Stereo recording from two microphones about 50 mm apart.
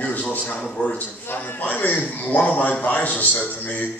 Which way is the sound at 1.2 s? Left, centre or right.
Left.